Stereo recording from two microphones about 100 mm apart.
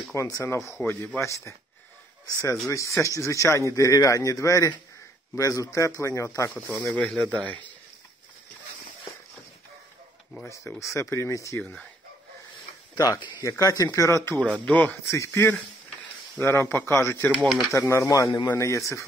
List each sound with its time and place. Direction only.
0.1 s a man's voice: 30° left (ahead or behind)
2.7 s a man's voice: 30° left (ahead or behind)
6.7 s speech: 10° left (ahead or behind)
10.8 s a man's voice: 30° left (ahead or behind)
12.9 s a man's voice: 35° left (ahead or behind)
14.6 s speech: 15° left (ahead or behind)
15.0 s speech: 30° left (ahead or behind)
17.3 s speech: centre (ahead or behind)
17.6 s speech: 30° left (ahead or behind)
18.5 s speech: 30° left (ahead or behind)